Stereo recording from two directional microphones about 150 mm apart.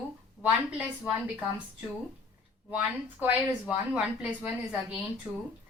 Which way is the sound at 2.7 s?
10° right (ahead or behind).